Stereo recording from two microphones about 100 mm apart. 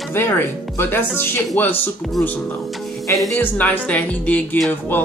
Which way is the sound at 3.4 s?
15° left (ahead or behind).